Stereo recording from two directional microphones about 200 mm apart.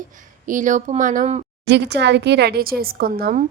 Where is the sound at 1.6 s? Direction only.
60° right (ahead or behind).